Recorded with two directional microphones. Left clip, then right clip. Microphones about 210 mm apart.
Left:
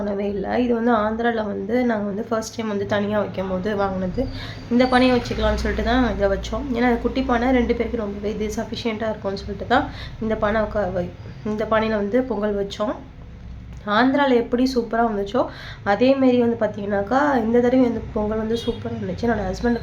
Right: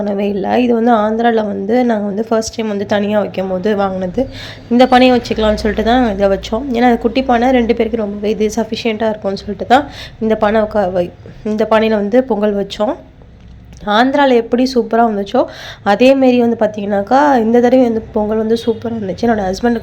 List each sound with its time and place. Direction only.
0.0 s speech: 35° right (ahead or behind)